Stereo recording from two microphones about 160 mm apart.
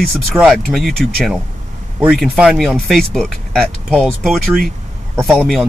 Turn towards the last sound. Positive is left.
turn(degrees=0)  # may be behind; listen again after turning